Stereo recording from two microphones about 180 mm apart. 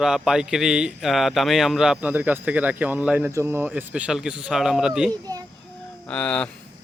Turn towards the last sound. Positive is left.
turn(degrees=5)  # may be behind; listen again after turning